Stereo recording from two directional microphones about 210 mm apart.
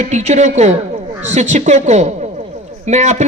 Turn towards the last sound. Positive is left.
turn(degrees=-35)  # may be behind; listen again after turning